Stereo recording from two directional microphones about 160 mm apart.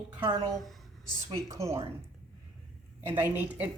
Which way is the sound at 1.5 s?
20° right (ahead or behind).